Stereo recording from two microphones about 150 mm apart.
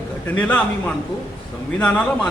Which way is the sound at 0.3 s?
10° left (ahead or behind).